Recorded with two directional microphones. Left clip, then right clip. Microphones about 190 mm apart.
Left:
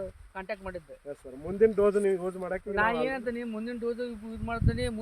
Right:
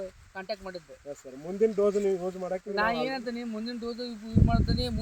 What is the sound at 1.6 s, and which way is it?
Speech, 15° right (ahead or behind).